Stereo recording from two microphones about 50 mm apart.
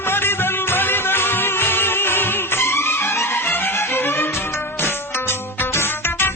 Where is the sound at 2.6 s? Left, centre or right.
Left.